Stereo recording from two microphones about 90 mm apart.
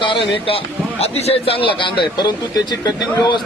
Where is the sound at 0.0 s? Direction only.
80° left.